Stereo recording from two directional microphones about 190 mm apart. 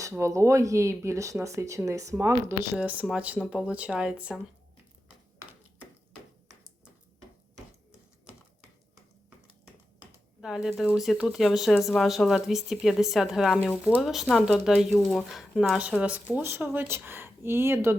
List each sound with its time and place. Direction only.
0.0 s speech: 15° right (ahead or behind)
10.4 s speech: 5° right (ahead or behind)